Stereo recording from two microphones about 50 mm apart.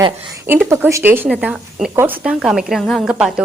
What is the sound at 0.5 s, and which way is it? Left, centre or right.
Speech, right.